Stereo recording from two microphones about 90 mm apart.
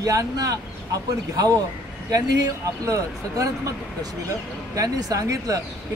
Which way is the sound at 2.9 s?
35° right (ahead or behind).